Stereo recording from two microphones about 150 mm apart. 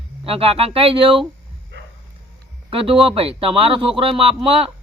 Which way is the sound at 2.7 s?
40° right (ahead or behind).